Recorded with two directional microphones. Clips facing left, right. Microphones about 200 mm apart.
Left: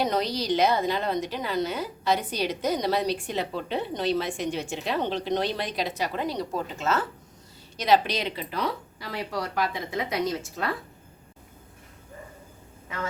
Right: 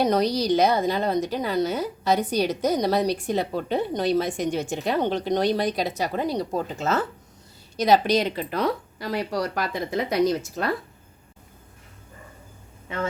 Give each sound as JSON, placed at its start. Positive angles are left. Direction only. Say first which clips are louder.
{"t": 0.1, "sound": "a woman's voice", "louder": "right 5 dB", "side_deg": -40}
{"t": 12.9, "sound": "speech", "louder": "right 5 dB", "side_deg": -30}